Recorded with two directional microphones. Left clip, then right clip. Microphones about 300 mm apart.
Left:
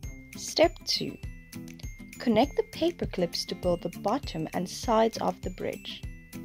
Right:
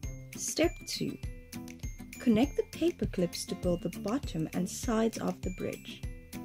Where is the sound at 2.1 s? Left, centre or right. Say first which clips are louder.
Left 4 dB; centre.